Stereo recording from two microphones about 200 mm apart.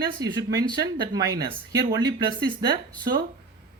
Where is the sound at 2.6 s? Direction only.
20° right (ahead or behind).